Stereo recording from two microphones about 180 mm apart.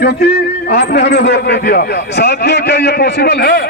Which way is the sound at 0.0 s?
65° left (ahead or behind).